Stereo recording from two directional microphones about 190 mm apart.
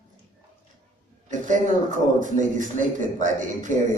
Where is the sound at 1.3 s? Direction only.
40° right (ahead or behind).